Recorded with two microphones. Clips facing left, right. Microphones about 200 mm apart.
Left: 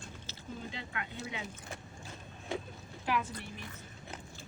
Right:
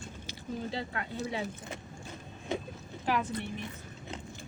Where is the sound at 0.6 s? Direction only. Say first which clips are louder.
Right 6 dB; 35° right (ahead or behind).